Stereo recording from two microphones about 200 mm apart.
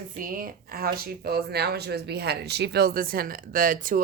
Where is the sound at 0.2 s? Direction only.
45° right (ahead or behind).